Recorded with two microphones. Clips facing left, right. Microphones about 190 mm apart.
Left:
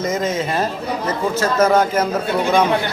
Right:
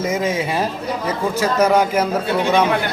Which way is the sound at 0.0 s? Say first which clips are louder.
Even; 10° right (ahead or behind).